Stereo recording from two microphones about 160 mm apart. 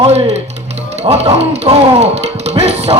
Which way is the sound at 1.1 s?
40° right (ahead or behind).